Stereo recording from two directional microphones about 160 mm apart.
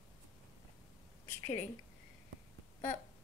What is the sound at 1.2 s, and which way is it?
Speech, 15° left (ahead or behind).